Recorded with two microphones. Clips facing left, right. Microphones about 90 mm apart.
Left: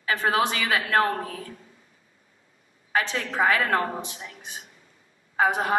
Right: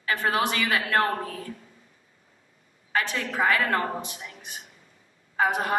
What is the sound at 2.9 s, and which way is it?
A woman's voice, 15° left (ahead or behind).